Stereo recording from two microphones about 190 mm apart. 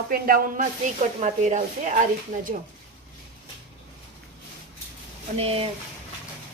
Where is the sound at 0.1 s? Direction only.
50° right (ahead or behind).